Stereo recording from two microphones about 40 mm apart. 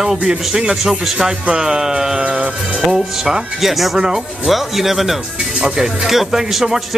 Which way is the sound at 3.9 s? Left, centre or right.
Right.